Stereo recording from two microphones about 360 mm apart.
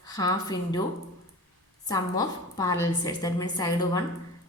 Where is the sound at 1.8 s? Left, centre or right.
Centre.